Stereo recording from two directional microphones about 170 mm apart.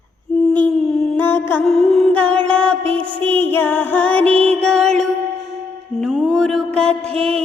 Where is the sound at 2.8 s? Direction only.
30° right (ahead or behind).